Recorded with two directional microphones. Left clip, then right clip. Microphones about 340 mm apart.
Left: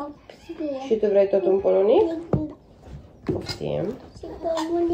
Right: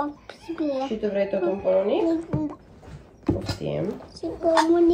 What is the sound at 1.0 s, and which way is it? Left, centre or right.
A woman's voice, centre.